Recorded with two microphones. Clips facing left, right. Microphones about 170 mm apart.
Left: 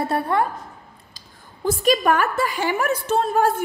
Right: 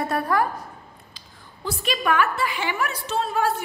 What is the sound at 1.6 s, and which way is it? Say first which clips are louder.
A woman's voice: left 6 dB; 40° left (ahead or behind).